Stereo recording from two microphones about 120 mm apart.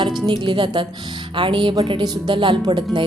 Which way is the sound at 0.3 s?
40° right (ahead or behind).